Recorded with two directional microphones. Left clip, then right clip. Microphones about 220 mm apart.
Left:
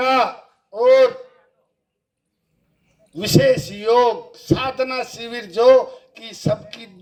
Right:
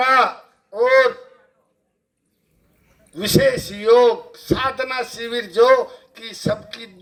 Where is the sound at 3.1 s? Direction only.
50° left (ahead or behind).